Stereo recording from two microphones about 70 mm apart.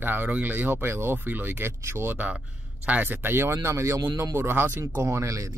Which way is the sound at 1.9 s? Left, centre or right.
Right.